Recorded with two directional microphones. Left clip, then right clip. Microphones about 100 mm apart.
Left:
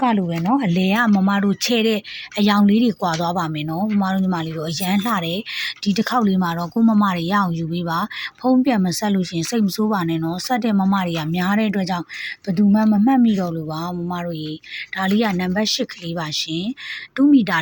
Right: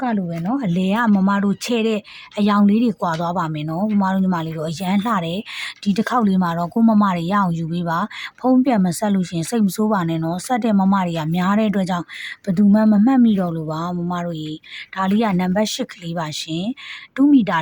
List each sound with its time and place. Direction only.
0.4 s speech: 15° right (ahead or behind)
0.7 s speech: 30° right (ahead or behind)